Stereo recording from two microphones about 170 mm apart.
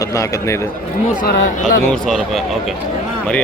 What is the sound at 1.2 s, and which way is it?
Speech, 60° left (ahead or behind).